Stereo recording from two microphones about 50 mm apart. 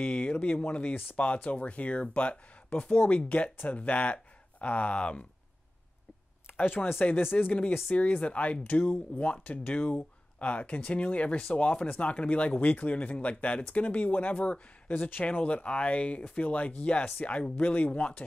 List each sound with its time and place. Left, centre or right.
0.0 s speech: left
6.4 s speech: left
7.9 s speech: left
15.2 s speech: left